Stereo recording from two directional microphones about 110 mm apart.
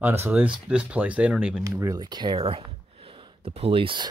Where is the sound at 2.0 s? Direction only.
40° right (ahead or behind).